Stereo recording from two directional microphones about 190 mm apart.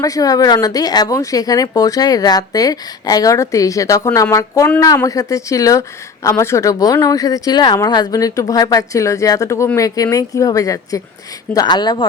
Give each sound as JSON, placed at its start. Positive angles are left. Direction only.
{"t": 0.0, "sound": "speech", "side_deg": 20}